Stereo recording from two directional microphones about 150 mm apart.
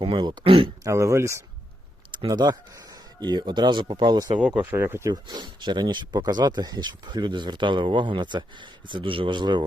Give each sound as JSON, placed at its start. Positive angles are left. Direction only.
{"t": 0.0, "sound": "speech", "side_deg": -35}
{"t": 0.9, "sound": "speech", "side_deg": -20}
{"t": 2.1, "sound": "speech", "side_deg": -30}
{"t": 4.4, "sound": "speech", "side_deg": -10}